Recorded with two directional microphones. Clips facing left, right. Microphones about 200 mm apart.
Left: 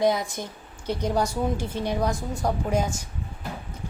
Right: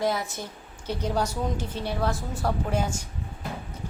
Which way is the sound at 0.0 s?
15° left (ahead or behind).